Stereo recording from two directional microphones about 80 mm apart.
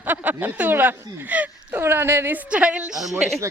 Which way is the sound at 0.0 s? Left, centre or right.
Right.